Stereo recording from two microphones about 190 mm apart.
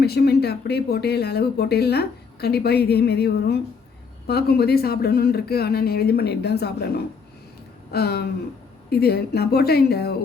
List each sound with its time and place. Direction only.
0.0 s speech: 55° left (ahead or behind)